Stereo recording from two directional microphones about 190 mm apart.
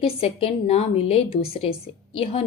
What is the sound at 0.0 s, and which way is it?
A woman's voice, 30° left (ahead or behind).